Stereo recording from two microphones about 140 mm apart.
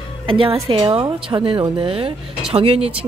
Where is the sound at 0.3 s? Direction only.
40° right (ahead or behind).